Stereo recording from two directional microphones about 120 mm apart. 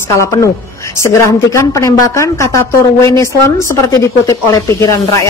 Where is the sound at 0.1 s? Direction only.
25° left (ahead or behind).